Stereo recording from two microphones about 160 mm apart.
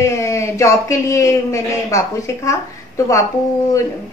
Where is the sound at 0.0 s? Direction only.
20° left (ahead or behind).